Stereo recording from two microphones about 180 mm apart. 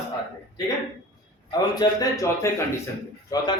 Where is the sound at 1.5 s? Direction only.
20° left (ahead or behind).